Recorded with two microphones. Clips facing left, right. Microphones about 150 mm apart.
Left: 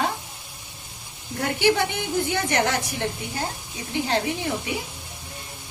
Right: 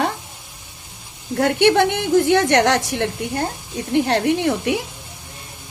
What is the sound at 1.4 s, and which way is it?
A woman's voice, 70° right (ahead or behind).